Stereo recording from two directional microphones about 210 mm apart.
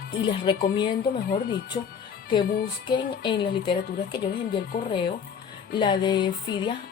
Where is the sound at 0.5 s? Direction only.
25° left (ahead or behind).